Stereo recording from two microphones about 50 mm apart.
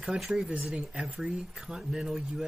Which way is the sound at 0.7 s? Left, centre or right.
Centre.